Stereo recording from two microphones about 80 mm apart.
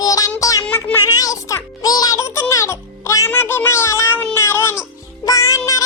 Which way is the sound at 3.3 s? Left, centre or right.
Left.